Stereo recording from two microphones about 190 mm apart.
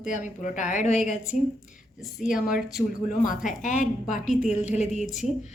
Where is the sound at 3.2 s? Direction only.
45° left (ahead or behind).